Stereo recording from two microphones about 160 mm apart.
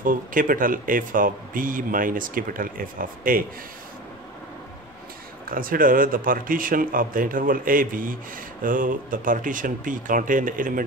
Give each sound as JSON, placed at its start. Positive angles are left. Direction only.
{"t": 0.0, "sound": "speech", "side_deg": -60}
{"t": 5.5, "sound": "speech", "side_deg": -60}